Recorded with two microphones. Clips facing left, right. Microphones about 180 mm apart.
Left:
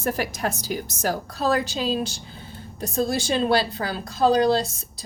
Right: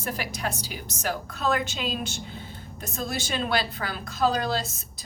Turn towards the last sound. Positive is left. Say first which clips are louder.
# left 6 dB
turn(degrees=30)  # may be behind; listen again after turning